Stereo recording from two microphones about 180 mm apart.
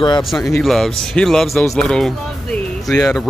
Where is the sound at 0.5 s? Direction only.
Centre (ahead or behind).